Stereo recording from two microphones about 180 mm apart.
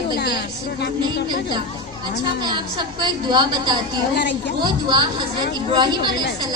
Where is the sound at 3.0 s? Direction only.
25° right (ahead or behind).